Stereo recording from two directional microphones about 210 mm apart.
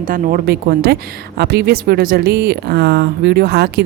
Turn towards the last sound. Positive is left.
turn(degrees=-50)  # may be behind; listen again after turning